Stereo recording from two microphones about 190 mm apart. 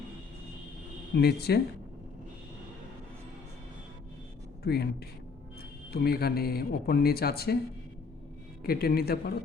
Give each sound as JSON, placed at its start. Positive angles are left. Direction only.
{"t": 1.1, "sound": "speech", "side_deg": 55}
{"t": 4.6, "sound": "speech", "side_deg": 55}
{"t": 8.6, "sound": "speech", "side_deg": 50}